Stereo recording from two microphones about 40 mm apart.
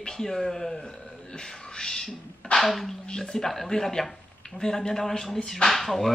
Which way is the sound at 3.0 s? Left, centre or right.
Centre.